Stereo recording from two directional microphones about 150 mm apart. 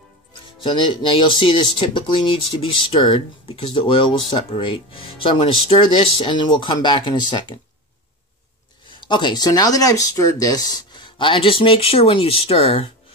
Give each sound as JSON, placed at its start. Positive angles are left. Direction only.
{"t": 0.7, "sound": "speech", "side_deg": 35}
{"t": 8.9, "sound": "speech", "side_deg": 30}